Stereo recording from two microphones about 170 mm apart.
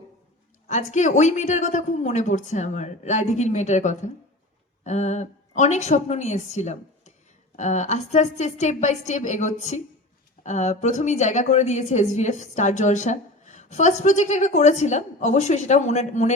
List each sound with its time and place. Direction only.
0.7 s a woman's voice: 45° left (ahead or behind)